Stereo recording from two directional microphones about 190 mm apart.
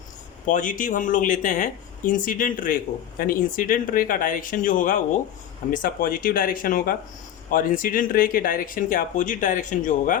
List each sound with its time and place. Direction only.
0.4 s speech: 45° left (ahead or behind)